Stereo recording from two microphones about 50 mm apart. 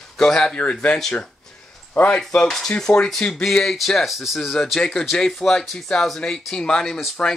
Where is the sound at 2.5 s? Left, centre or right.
Centre.